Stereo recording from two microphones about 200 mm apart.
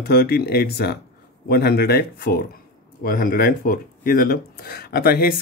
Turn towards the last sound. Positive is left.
turn(degrees=50)  # may be behind; listen again after turning